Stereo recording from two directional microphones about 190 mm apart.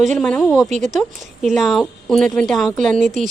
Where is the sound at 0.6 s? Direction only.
40° right (ahead or behind).